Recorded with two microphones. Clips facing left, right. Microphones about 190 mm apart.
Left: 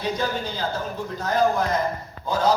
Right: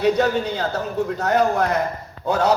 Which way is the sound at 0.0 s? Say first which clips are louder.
Right 8 dB; 65° right (ahead or behind).